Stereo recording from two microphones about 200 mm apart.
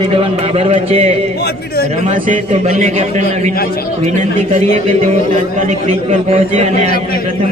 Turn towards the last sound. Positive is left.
turn(degrees=-30)  # may be behind; listen again after turning